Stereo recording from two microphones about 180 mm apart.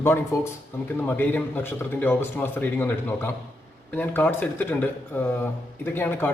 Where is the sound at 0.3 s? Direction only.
15° left (ahead or behind).